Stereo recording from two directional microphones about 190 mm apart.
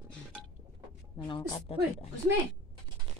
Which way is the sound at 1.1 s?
25° left (ahead or behind).